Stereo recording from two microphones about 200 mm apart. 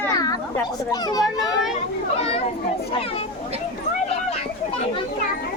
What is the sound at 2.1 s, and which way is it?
Speech, 30° left (ahead or behind).